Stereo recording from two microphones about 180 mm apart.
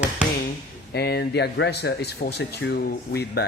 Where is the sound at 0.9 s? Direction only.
65° left (ahead or behind).